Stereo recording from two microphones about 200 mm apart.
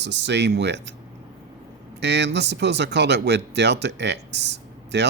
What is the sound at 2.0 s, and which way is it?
Speech, 60° right (ahead or behind).